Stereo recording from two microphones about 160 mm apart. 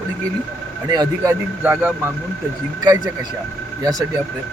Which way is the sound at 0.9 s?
25° right (ahead or behind).